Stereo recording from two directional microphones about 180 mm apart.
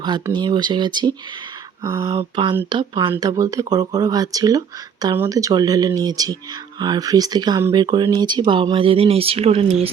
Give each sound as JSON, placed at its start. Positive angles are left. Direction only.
{"t": 0.3, "sound": "speech", "side_deg": -25}
{"t": 2.0, "sound": "speech", "side_deg": -25}